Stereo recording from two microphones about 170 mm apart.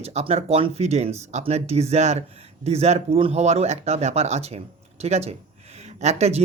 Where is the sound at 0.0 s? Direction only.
40° right (ahead or behind).